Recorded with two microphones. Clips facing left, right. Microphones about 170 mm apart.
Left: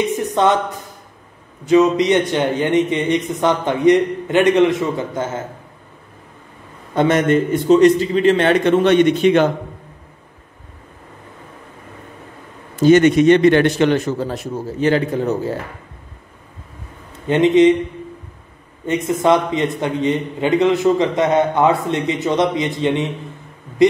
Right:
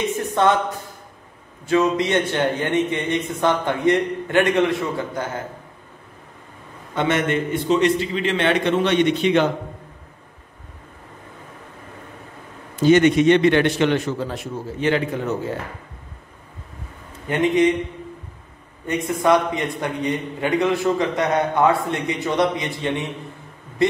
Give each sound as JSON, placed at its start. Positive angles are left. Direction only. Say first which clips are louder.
{"t": 0.1, "sound": "a woman's voice", "louder": "left 3 dB", "side_deg": 20}
{"t": 7.0, "sound": "a man's voice", "louder": "left 6 dB", "side_deg": 40}
{"t": 12.8, "sound": "a man's voice", "louder": "left 3 dB", "side_deg": 45}
{"t": 17.3, "sound": "a man's voice", "louder": "left 6 dB", "side_deg": 20}
{"t": 19.0, "sound": "a man's voice", "louder": "left 2 dB", "side_deg": 20}